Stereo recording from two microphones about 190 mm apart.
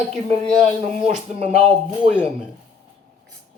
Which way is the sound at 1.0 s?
35° right (ahead or behind).